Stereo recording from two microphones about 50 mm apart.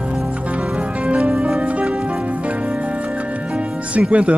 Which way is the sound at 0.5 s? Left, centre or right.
Right.